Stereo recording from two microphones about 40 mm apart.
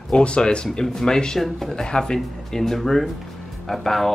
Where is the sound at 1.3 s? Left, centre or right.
Centre.